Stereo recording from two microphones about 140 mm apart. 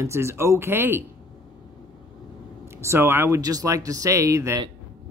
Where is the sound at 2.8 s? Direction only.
20° right (ahead or behind).